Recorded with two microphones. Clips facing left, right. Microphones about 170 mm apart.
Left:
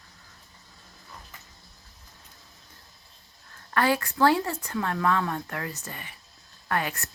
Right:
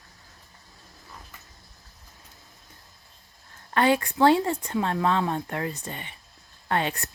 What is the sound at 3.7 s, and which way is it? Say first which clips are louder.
A woman's voice: right 3 dB; 20° right (ahead or behind).